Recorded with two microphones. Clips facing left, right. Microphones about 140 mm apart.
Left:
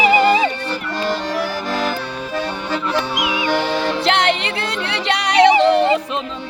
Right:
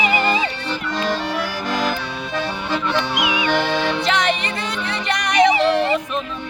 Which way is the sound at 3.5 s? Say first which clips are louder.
Left 2 dB; 10° left (ahead or behind).